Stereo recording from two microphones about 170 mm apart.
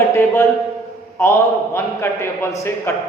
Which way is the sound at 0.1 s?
15° left (ahead or behind).